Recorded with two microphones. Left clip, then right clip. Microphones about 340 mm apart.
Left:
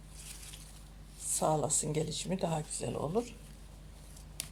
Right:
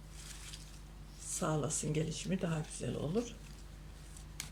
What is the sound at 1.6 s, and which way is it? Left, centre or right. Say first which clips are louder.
Speech: left 4 dB; centre.